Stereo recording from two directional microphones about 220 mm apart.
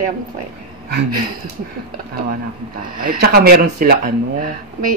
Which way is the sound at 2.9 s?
40° right (ahead or behind).